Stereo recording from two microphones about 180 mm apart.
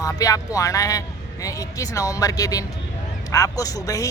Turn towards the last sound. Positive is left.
turn(degrees=20)  # may be behind; listen again after turning